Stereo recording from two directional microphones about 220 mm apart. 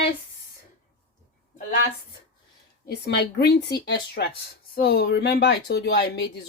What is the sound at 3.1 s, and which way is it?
Speech, 45° left (ahead or behind).